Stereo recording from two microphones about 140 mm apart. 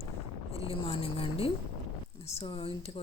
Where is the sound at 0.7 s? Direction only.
45° left (ahead or behind).